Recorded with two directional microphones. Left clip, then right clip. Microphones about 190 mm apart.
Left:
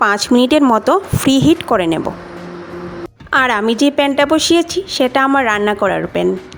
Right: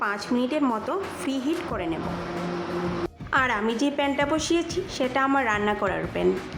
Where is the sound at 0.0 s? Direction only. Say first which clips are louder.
Left 14 dB; 55° left (ahead or behind).